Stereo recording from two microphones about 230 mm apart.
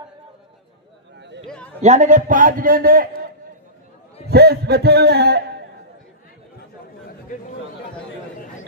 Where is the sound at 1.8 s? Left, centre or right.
Right.